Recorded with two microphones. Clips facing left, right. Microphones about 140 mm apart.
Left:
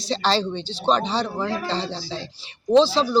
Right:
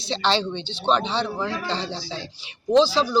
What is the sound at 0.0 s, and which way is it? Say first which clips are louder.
Speech: left 1 dB; 40° left (ahead or behind).